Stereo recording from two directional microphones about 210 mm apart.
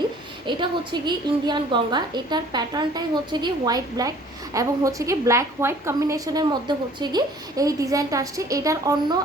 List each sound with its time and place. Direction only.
0.4 s a woman's voice: 20° right (ahead or behind)